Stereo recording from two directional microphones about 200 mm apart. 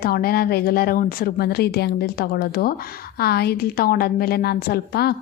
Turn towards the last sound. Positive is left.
turn(degrees=50)  # may be behind; listen again after turning